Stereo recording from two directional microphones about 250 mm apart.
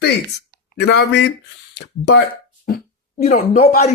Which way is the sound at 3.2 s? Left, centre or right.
Left.